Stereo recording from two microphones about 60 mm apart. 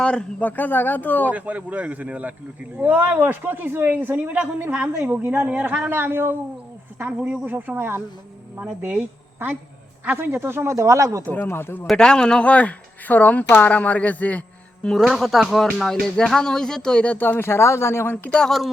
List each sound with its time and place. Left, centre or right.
0.0 s a man's voice: centre
1.3 s speech: right
7.0 s speech: centre
10.2 s speech: right
11.4 s a man's voice: left
11.9 s speech: centre
14.8 s speech: centre
17.2 s speech: left